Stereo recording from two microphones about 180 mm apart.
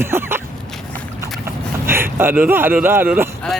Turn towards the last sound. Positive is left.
turn(degrees=-10)  # may be behind; listen again after turning